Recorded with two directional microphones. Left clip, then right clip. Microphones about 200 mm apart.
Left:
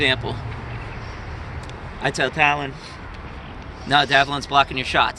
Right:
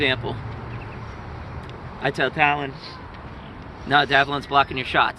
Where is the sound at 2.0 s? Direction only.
15° left (ahead or behind).